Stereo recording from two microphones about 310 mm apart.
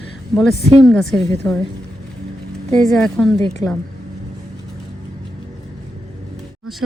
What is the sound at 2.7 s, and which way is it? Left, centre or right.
Speech, centre.